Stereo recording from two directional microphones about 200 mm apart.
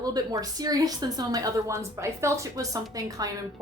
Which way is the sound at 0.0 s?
20° right (ahead or behind).